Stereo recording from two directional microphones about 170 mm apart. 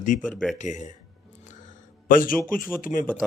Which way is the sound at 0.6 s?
45° left (ahead or behind).